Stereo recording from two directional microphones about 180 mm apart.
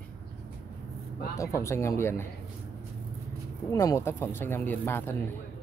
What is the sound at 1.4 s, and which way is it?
Speech, 15° left (ahead or behind).